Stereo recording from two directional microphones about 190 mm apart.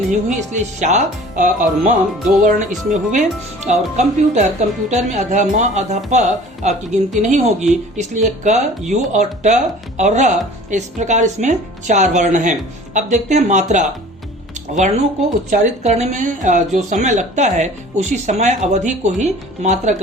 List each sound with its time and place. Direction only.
0.3 s speech: 40° right (ahead or behind)
15.4 s speech: 40° right (ahead or behind)